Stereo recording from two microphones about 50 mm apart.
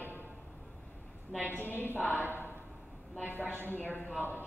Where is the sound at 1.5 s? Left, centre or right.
Left.